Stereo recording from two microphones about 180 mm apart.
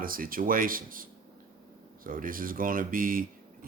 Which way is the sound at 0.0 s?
50° right (ahead or behind).